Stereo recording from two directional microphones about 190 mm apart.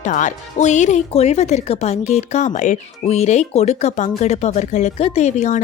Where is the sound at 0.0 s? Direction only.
40° left (ahead or behind).